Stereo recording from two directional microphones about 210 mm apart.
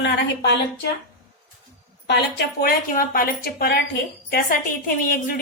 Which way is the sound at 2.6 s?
45° left (ahead or behind).